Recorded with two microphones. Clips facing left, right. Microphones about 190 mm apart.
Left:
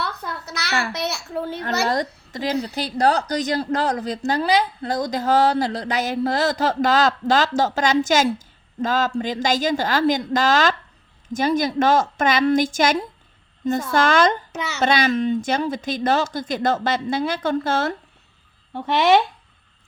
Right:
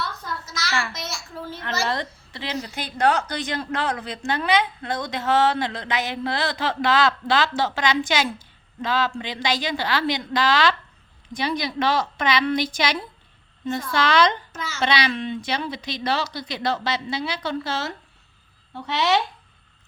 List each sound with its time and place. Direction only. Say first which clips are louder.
0.0 s a sound: left 2 dB; 65° left (ahead or behind)
1.9 s a woman's voice: left 5 dB; 45° left (ahead or behind)
14.5 s a child's voice: left 5 dB; 70° left (ahead or behind)
14.8 s a woman's voice: left 4 dB; 45° left (ahead or behind)